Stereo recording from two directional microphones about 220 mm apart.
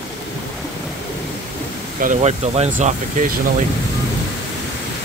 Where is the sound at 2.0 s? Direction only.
35° right (ahead or behind).